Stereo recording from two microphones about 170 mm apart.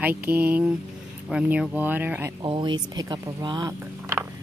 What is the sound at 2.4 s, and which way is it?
Speech, 30° right (ahead or behind).